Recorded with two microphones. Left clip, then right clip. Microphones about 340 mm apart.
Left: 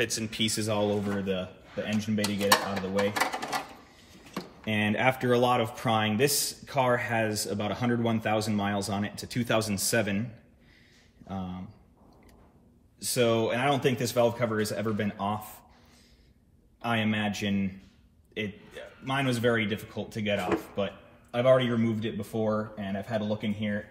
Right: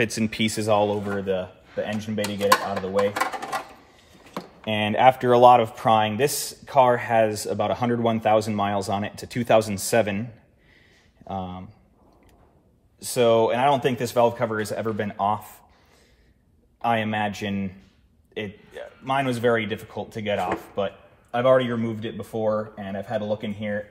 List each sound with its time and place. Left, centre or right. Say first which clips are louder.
0.0 s speech: right 5 dB; right
11.2 s speech: right 8 dB; centre
13.0 s speech: right 7 dB; centre
16.8 s speech: right 6 dB; centre